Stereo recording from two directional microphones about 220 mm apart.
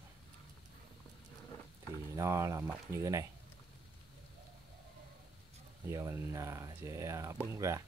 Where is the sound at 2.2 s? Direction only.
15° right (ahead or behind).